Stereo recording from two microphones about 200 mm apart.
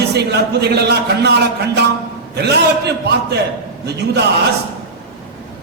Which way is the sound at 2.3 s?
55° right (ahead or behind).